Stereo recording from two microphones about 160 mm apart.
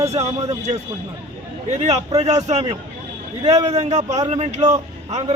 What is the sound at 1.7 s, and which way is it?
A man's voice, 45° right (ahead or behind).